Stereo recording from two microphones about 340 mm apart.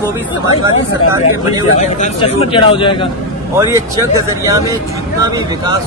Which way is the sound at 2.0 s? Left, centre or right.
Centre.